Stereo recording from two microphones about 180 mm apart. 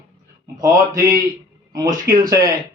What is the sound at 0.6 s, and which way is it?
A man's voice, 20° right (ahead or behind).